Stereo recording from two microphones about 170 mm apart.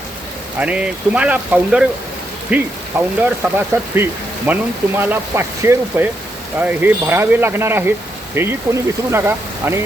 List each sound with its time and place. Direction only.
0.6 s speech: 5° right (ahead or behind)